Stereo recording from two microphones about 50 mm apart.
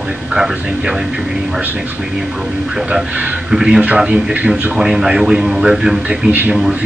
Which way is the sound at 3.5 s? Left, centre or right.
Centre.